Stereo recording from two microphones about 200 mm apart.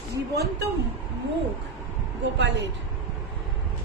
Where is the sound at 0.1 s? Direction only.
55° right (ahead or behind).